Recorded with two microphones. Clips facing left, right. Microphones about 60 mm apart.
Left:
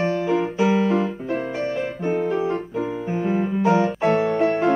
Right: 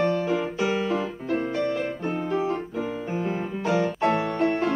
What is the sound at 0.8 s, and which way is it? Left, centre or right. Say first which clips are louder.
Music: left 5 dB; centre.